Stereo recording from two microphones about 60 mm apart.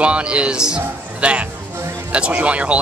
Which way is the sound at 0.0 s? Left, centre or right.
Centre.